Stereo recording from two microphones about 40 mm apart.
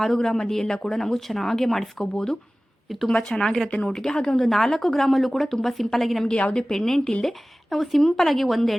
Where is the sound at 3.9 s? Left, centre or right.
Centre.